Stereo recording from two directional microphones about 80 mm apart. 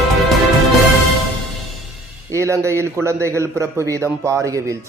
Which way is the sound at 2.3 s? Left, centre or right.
Right.